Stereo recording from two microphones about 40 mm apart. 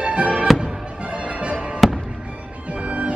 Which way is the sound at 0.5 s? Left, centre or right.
Centre.